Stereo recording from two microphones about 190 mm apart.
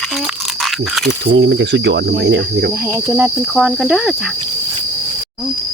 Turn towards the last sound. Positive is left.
turn(degrees=0)  # may be behind; listen again after turning